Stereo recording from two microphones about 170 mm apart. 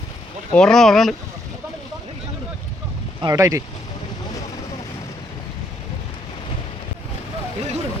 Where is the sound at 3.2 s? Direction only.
20° right (ahead or behind).